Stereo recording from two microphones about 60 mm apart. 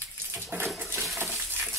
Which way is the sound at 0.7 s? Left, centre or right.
Right.